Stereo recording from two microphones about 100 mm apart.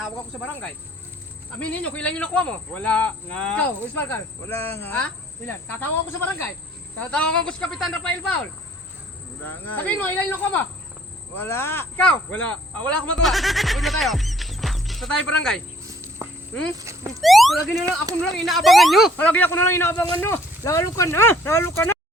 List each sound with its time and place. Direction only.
0.0 s speech: 10° left (ahead or behind)
4.1 s speech: 25° left (ahead or behind)
7.0 s speech: 10° left (ahead or behind)
9.5 s speech: 20° left (ahead or behind)
12.0 s speech: 15° left (ahead or behind)
13.2 s speech: centre (ahead or behind)
15.9 s cricket: 30° right (ahead or behind)
16.7 s speech: 30° right (ahead or behind)
17.2 s speech: centre (ahead or behind)
19.1 s speech: 15° left (ahead or behind)